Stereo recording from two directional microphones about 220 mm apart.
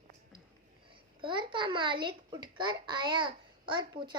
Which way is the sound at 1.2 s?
20° right (ahead or behind).